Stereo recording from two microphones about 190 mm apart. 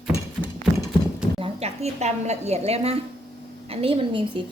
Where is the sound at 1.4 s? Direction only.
35° right (ahead or behind).